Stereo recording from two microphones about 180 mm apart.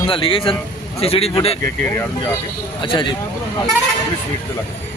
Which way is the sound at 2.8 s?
30° left (ahead or behind).